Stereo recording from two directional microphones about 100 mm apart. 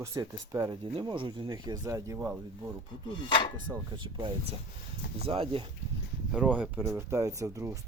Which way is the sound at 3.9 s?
55° right (ahead or behind).